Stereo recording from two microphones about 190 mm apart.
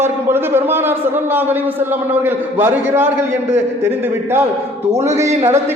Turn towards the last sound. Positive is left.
turn(degrees=-15)  # may be behind; listen again after turning